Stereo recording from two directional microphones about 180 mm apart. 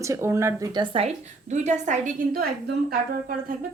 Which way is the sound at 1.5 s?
40° right (ahead or behind).